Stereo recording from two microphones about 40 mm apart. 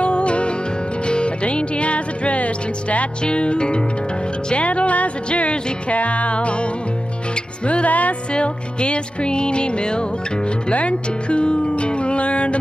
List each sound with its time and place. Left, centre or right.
0.0 s music: left
8.3 s music: left